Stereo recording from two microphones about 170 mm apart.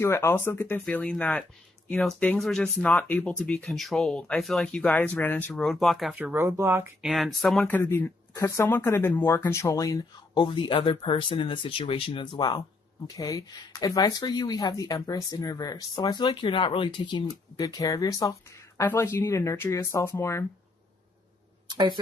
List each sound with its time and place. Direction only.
0.0 s speech: 15° left (ahead or behind); by 6.9 s 15° right (ahead or behind)
7.0 s speech: centre (ahead or behind)
7.6 s speech: 15° left (ahead or behind)
21.7 s speech: 25° right (ahead or behind)